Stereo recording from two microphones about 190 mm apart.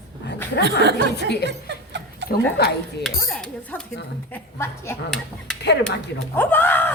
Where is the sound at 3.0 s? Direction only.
5° left (ahead or behind).